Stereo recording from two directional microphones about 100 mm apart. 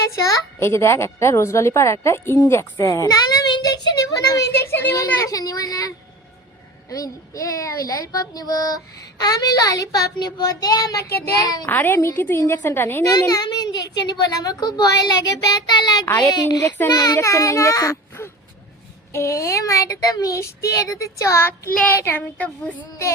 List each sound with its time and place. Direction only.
0.2 s a child's voice: 30° left (ahead or behind)
2.7 s a sound: 35° left (ahead or behind)
4.5 s a child's voice: 25° left (ahead or behind)
4.9 s child singing: 35° left (ahead or behind)
6.9 s child singing: 35° left (ahead or behind)
11.7 s a child's voice: 20° left (ahead or behind)
13.1 s child singing: 40° left (ahead or behind)
16.3 s speech: 40° left (ahead or behind)
16.9 s child singing: 40° left (ahead or behind)
21.8 s speech: 20° left (ahead or behind)